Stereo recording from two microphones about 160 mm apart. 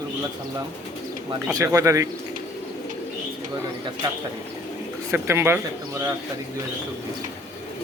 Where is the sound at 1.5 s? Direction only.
20° right (ahead or behind).